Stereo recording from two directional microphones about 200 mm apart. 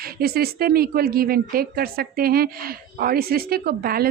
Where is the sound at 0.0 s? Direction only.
50° right (ahead or behind).